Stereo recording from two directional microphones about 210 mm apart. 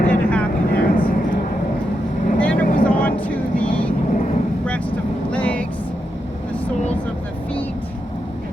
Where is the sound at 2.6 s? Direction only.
40° left (ahead or behind).